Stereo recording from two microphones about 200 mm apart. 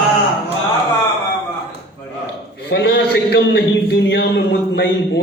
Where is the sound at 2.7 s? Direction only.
55° left (ahead or behind).